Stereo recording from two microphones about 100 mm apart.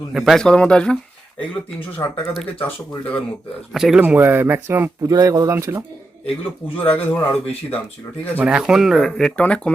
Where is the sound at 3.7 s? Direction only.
5° right (ahead or behind).